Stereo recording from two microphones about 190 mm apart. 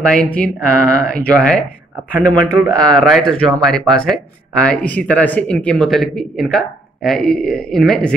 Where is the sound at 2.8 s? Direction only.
5° left (ahead or behind).